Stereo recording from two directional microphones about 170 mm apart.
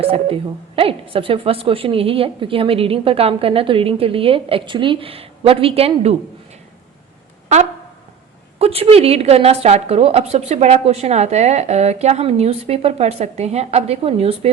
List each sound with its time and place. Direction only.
0.0 s a woman's voice: 35° right (ahead or behind)
7.4 s a sound: 40° right (ahead or behind)
8.5 s a woman's voice: 35° right (ahead or behind)